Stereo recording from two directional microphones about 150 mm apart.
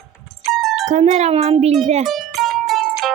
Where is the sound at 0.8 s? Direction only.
50° right (ahead or behind).